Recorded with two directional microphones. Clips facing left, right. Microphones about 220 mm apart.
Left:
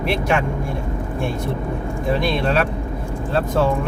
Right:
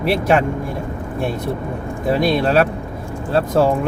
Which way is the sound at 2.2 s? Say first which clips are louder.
Right 6 dB; 35° right (ahead or behind).